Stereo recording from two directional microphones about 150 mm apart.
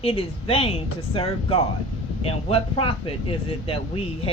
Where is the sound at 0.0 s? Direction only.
40° left (ahead or behind).